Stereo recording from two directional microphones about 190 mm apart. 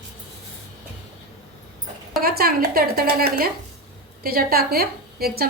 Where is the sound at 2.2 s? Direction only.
50° right (ahead or behind).